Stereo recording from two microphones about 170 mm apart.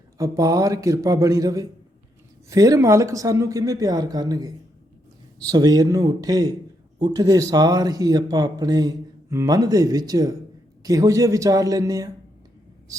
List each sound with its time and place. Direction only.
0.2 s speech: 20° right (ahead or behind)